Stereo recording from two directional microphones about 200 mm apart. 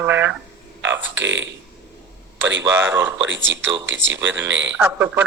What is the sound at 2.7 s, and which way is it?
Speech, 10° right (ahead or behind).